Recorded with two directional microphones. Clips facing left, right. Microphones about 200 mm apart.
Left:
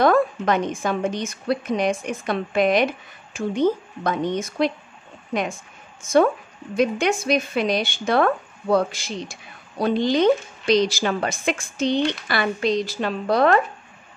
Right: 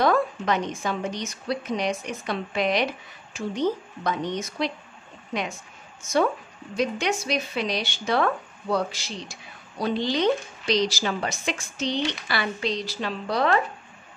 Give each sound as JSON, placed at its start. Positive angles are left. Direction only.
{"t": 0.0, "sound": "speech", "side_deg": 50}
{"t": 6.8, "sound": "speech", "side_deg": 50}